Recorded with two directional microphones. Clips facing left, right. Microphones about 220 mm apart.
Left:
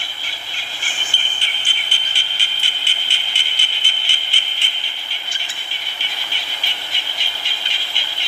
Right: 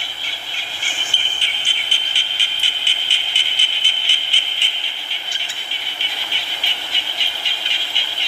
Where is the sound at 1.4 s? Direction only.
45° left (ahead or behind).